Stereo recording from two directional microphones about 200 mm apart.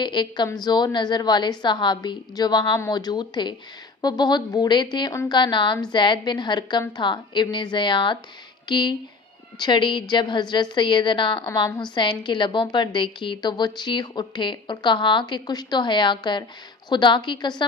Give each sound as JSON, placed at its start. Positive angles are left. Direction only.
{"t": 0.0, "sound": "a woman's voice", "side_deg": 25}